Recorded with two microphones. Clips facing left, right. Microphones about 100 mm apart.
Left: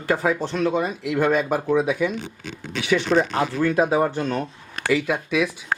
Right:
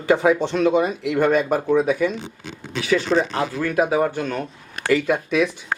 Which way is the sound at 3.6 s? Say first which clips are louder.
Even; 25° left (ahead or behind).